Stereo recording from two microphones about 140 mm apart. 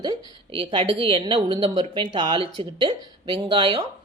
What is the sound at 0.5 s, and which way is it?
A woman's voice, 40° right (ahead or behind).